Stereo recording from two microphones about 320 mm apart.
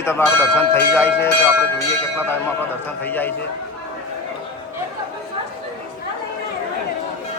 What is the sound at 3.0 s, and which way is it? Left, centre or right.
Speech, centre.